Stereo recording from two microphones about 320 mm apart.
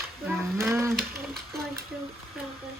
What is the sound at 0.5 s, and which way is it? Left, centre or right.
Speech, centre.